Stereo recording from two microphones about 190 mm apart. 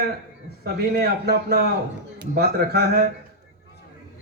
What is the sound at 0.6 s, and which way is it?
A man's voice, 55° right (ahead or behind).